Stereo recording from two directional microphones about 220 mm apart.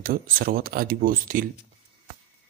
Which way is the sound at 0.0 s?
40° right (ahead or behind).